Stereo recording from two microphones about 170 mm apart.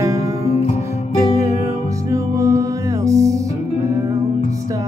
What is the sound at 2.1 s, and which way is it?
Music, 20° right (ahead or behind).